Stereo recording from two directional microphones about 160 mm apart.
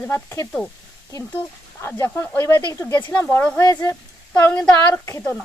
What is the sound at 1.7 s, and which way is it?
Speech, 15° left (ahead or behind).